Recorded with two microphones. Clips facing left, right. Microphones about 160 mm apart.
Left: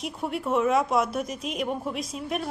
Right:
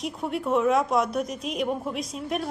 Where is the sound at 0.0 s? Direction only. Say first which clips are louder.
Right 1 dB; centre (ahead or behind).